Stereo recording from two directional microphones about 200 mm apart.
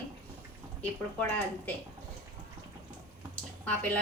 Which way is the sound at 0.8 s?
10° left (ahead or behind).